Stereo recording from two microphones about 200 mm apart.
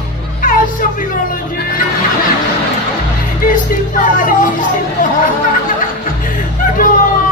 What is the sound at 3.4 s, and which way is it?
Speech, 40° left (ahead or behind).